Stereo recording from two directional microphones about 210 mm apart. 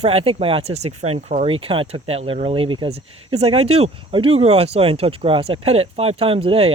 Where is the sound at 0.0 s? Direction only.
30° right (ahead or behind).